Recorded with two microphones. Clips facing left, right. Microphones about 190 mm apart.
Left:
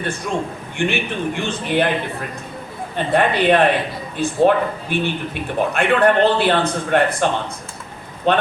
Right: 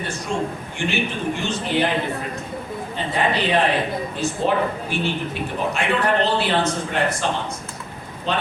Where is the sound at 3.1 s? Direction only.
60° left (ahead or behind).